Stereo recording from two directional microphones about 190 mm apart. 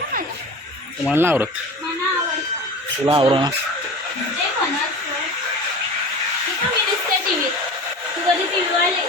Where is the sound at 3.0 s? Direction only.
25° right (ahead or behind).